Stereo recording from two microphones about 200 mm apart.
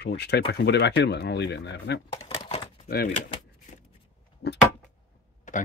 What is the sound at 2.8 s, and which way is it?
Speech, 50° left (ahead or behind).